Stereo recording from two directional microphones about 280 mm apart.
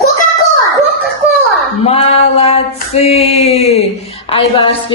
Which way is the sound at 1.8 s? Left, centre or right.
Left.